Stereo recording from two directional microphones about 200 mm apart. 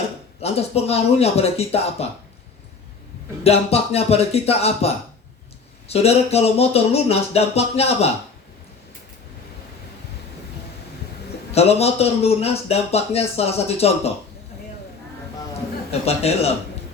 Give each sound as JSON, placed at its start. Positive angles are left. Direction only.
{"t": 0.4, "sound": "speech", "side_deg": 30}
{"t": 3.4, "sound": "speech", "side_deg": 30}
{"t": 5.9, "sound": "speech", "side_deg": 30}
{"t": 11.5, "sound": "speech", "side_deg": 30}
{"t": 15.9, "sound": "speech", "side_deg": 30}